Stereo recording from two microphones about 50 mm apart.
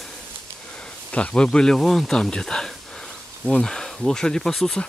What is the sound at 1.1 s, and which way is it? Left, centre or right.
Speech, left.